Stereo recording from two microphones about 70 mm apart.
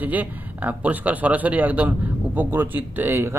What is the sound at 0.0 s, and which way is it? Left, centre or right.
Speech, right.